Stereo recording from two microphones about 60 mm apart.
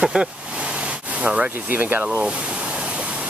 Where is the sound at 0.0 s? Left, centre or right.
Centre.